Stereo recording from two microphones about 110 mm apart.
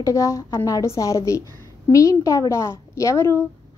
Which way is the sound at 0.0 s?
30° left (ahead or behind).